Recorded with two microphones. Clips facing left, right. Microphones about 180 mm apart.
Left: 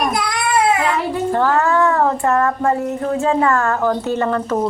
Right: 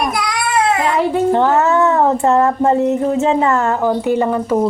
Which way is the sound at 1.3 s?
20° right (ahead or behind).